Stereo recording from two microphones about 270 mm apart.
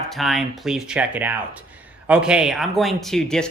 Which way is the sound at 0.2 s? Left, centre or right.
Centre.